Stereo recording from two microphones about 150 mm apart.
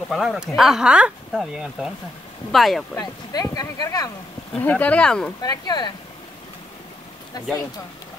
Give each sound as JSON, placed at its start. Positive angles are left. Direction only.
{"t": 0.1, "sound": "speech", "side_deg": 0}
{"t": 3.0, "sound": "speech", "side_deg": 25}
{"t": 4.6, "sound": "speech", "side_deg": 10}
{"t": 5.4, "sound": "speech", "side_deg": 25}